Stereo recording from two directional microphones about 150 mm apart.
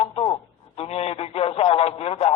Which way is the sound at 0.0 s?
40° left (ahead or behind).